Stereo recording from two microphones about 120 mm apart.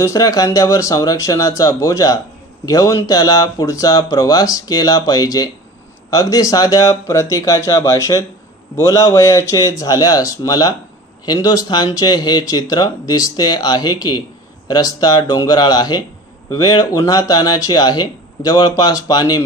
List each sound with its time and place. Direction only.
0.0 s speech: 30° left (ahead or behind)